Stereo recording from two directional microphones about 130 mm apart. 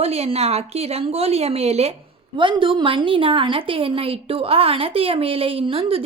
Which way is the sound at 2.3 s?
40° right (ahead or behind).